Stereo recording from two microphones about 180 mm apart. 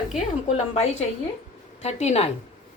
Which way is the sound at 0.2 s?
35° left (ahead or behind).